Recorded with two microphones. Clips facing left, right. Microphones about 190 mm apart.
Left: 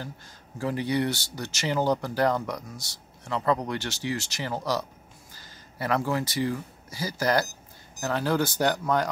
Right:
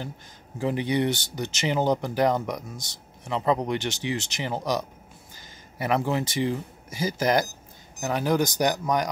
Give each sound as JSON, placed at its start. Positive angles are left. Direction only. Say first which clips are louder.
{"t": 0.6, "sound": "speech", "louder": "right 2 dB", "side_deg": -20}